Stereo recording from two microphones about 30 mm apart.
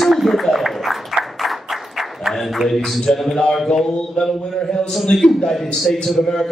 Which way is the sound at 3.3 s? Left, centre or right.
Centre.